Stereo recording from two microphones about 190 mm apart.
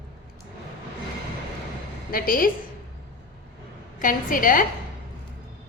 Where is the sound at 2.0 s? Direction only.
50° left (ahead or behind).